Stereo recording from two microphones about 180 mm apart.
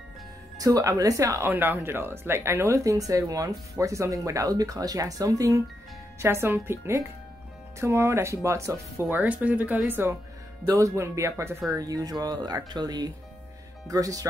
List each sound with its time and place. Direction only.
0.6 s speech: 20° right (ahead or behind)